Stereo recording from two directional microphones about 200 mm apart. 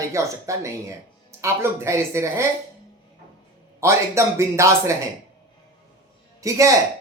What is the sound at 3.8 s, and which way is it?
Speech, 15° right (ahead or behind).